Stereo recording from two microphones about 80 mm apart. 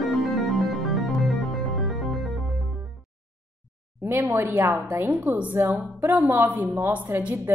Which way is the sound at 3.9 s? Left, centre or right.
Right.